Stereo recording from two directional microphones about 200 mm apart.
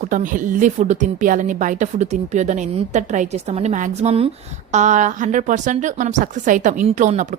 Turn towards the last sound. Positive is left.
turn(degrees=-35)  # may be behind; listen again after turning